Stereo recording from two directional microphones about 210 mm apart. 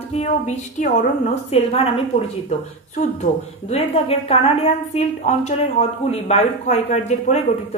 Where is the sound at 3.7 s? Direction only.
30° left (ahead or behind).